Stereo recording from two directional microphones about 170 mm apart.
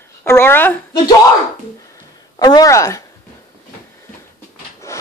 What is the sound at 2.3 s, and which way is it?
Speech, 25° left (ahead or behind).